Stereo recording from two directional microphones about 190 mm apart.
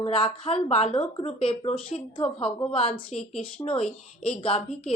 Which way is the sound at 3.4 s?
30° left (ahead or behind).